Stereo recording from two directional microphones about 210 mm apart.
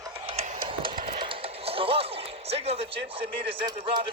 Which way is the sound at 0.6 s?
25° right (ahead or behind).